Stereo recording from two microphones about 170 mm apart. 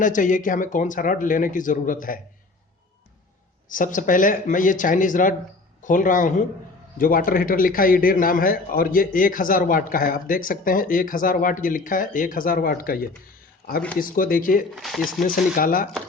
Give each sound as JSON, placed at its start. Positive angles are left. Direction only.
{"t": 0.0, "sound": "speech", "side_deg": 50}
{"t": 3.7, "sound": "a man's voice", "side_deg": 50}
{"t": 14.8, "sound": "speech", "side_deg": 0}
{"t": 15.2, "sound": "a man's voice", "side_deg": 55}